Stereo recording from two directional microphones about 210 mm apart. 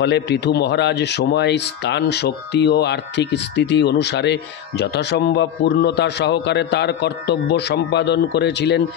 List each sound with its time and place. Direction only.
0.0 s speech: 55° left (ahead or behind)